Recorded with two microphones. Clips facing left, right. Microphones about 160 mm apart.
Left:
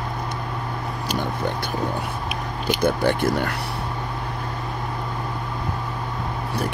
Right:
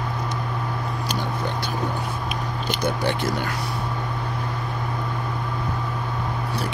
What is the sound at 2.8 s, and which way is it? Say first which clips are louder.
Speech: left 4 dB; 55° left (ahead or behind).